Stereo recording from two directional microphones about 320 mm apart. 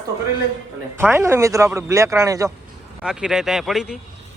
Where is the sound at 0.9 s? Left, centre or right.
Centre.